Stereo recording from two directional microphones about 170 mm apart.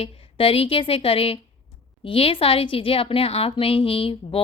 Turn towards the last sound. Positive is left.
turn(degrees=35)  # may be behind; listen again after turning